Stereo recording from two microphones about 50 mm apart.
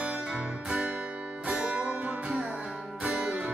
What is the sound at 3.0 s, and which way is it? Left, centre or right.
Music, centre.